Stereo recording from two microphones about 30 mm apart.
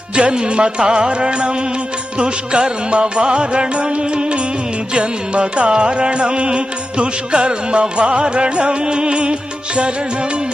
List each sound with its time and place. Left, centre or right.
0.2 s music: right